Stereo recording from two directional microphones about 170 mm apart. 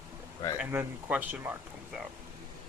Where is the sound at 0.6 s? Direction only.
10° right (ahead or behind).